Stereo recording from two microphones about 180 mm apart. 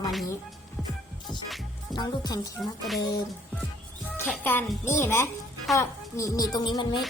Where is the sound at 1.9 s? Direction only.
25° left (ahead or behind).